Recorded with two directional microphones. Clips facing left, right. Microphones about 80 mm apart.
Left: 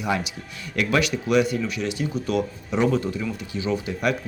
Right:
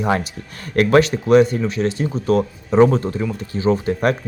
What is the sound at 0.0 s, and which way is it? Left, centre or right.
Speech, right.